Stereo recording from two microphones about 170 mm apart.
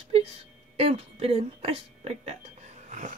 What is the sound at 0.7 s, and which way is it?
Music, 35° right (ahead or behind).